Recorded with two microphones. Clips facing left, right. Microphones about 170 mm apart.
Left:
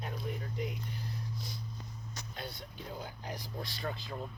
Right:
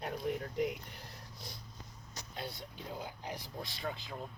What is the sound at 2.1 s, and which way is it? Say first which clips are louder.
Speech: right 1 dB; 30° right (ahead or behind).